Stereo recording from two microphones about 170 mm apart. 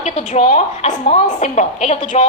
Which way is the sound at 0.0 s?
40° left (ahead or behind).